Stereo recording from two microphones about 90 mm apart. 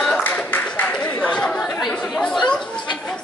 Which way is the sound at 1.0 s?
10° left (ahead or behind).